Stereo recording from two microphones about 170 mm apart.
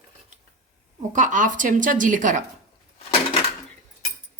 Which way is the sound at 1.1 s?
50° right (ahead or behind).